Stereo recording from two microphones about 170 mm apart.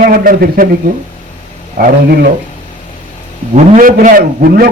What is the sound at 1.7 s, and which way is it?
Speech, 60° right (ahead or behind).